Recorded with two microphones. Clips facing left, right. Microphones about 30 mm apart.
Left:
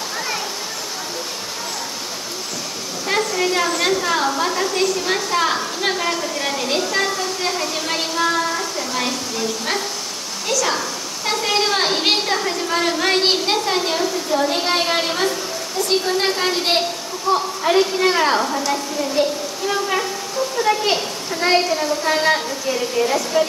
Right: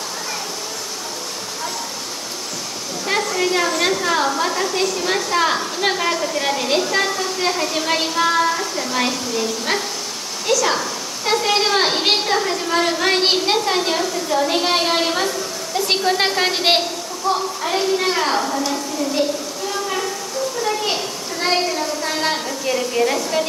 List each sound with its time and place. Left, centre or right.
3.1 s a woman's voice: centre
15.9 s a woman's voice: centre
17.3 s a child's voice: centre
19.7 s a sound: centre
21.5 s a child's voice: centre
22.7 s a woman's voice: centre